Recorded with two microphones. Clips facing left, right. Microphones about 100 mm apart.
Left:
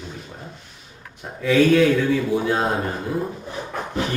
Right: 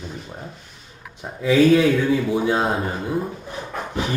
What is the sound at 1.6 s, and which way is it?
A man's voice, centre (ahead or behind).